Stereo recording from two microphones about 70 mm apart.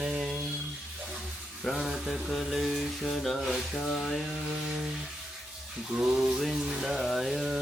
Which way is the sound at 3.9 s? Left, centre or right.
Centre.